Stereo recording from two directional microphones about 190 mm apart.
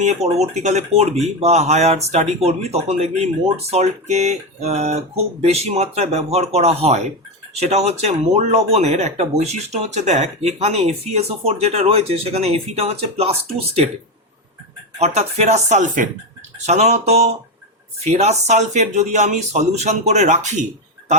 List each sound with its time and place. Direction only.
0.0 s speech: 35° right (ahead or behind)
14.9 s speech: 35° right (ahead or behind)